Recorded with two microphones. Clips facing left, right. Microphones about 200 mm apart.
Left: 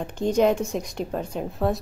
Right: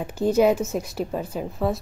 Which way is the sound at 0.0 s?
5° right (ahead or behind).